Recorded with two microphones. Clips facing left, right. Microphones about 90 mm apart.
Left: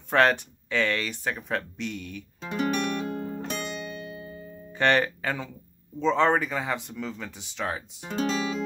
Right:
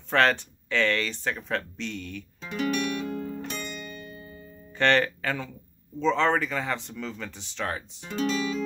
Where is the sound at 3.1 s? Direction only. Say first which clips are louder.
Even; 40° left (ahead or behind).